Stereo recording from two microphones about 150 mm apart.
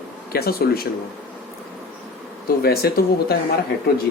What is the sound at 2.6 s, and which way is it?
Speech, 90° left.